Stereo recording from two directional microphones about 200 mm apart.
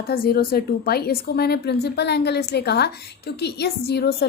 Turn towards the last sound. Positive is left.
turn(degrees=55)  # may be behind; listen again after turning